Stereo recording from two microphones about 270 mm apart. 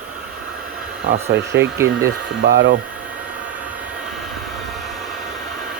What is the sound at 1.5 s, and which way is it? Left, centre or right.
Speech, right.